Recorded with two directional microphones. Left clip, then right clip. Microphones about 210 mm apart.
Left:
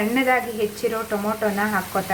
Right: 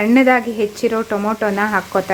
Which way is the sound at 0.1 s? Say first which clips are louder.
Right 8 dB; 50° right (ahead or behind).